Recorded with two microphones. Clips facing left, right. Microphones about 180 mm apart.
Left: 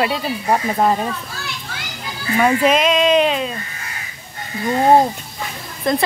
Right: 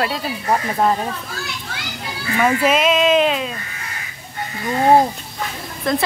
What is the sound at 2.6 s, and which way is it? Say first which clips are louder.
Speech: left 1 dB; 5° right (ahead or behind).